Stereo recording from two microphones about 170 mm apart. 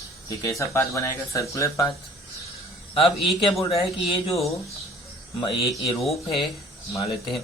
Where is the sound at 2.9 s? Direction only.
35° left (ahead or behind).